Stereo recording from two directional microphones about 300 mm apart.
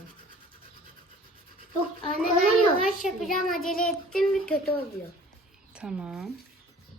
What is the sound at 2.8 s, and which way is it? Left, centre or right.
A woman's voice, centre.